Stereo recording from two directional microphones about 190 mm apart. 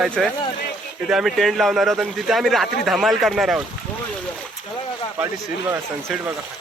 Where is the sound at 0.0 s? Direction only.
Centre (ahead or behind).